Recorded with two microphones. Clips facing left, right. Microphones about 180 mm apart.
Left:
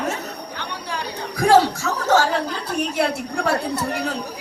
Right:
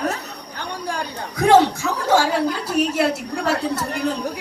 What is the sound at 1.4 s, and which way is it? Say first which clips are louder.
Speech: right 1 dB; 20° right (ahead or behind).